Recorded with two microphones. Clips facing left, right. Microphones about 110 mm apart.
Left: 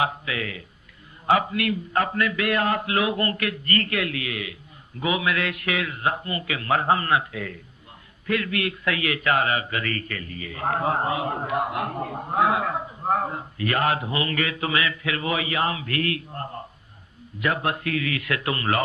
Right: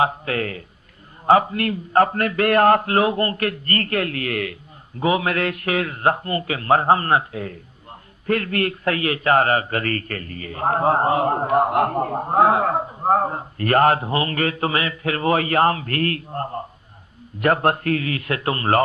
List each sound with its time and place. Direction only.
0.0 s a man's voice: 45° right (ahead or behind)
4.9 s a man's voice: 40° right (ahead or behind)
17.4 s a man's voice: 50° right (ahead or behind)